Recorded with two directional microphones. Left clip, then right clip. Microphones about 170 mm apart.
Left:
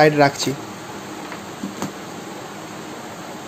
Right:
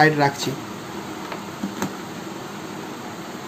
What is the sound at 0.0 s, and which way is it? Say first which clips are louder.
Speech: left 3 dB; 30° left (ahead or behind).